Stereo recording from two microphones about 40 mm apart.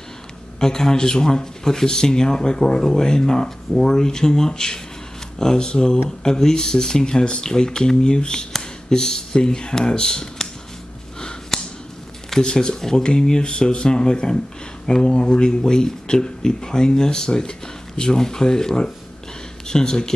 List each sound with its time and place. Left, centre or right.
0.6 s speech: centre
11.1 s sniff: centre
12.4 s speech: centre